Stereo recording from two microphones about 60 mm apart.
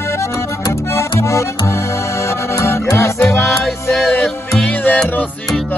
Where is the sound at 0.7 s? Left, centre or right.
Left.